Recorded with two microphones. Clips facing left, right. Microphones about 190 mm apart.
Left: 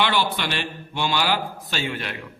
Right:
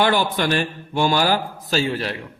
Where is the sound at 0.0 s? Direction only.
45° right (ahead or behind).